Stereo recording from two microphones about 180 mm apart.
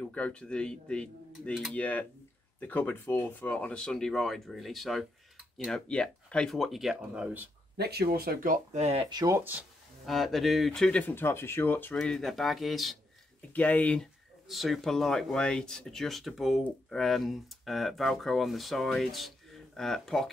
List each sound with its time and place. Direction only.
0.0 s speech: 5° left (ahead or behind)
7.7 s speech: 65° right (ahead or behind); by 9.0 s 35° right (ahead or behind)
9.1 s speech: 20° right (ahead or behind); by 20.2 s centre (ahead or behind)